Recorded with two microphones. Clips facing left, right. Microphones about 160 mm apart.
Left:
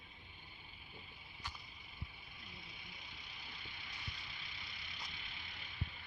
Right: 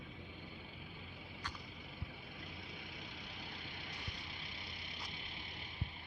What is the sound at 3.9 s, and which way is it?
Vehicle, 50° right (ahead or behind).